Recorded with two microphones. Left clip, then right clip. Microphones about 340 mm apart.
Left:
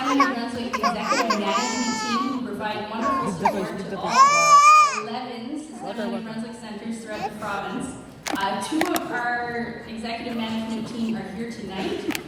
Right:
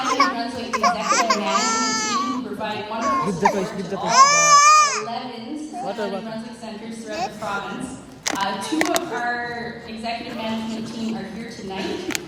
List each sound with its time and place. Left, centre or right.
0.0 s a sound: right
0.7 s music: right
3.0 s speech: right
4.0 s baby cry: right
8.2 s speech: right